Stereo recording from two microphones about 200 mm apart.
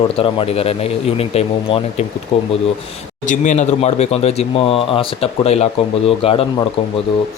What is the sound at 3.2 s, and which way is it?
Speech, 40° left (ahead or behind).